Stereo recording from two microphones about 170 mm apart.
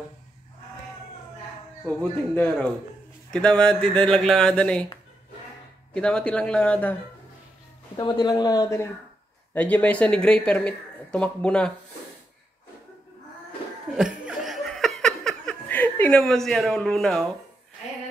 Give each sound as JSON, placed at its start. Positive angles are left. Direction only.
{"t": 1.9, "sound": "speech", "side_deg": 5}
{"t": 5.9, "sound": "speech", "side_deg": 5}
{"t": 8.0, "sound": "speech", "side_deg": 25}
{"t": 13.9, "sound": "laughter", "side_deg": -5}